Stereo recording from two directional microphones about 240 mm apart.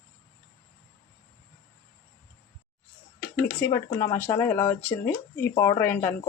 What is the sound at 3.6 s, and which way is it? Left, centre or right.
Speech, centre.